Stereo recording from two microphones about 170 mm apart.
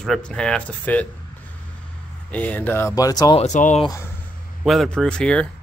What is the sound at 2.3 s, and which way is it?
Speech, 10° left (ahead or behind).